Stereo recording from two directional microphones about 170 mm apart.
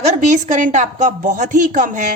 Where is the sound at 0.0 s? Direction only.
45° right (ahead or behind).